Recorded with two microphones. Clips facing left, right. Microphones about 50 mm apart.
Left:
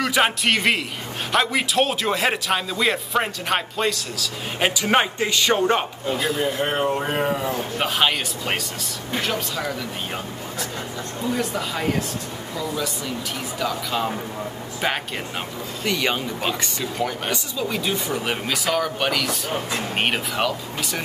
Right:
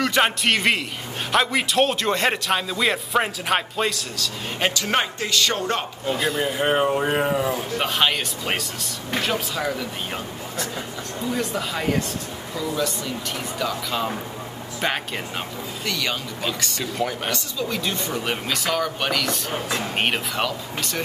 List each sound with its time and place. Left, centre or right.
0.0 s a man's voice: centre
6.0 s a man's voice: centre
15.8 s speech: centre
16.8 s a man's voice: centre
17.3 s a man's voice: centre